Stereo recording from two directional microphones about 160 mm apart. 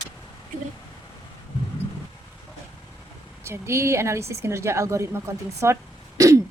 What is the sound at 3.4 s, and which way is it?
Speech, 15° right (ahead or behind).